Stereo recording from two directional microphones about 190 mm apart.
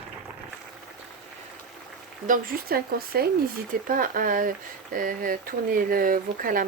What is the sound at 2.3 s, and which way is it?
Speech, 50° right (ahead or behind).